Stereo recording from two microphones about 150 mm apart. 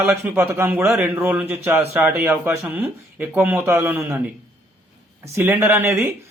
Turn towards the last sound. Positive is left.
turn(degrees=-15)  # may be behind; listen again after turning